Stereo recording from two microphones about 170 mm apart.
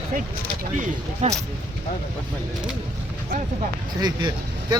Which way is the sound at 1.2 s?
40° right (ahead or behind).